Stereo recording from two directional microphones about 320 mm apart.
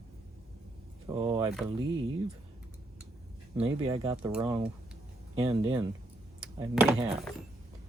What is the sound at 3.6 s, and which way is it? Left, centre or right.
Speech, centre.